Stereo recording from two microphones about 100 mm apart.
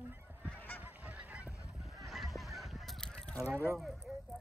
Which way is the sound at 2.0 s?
Centre (ahead or behind).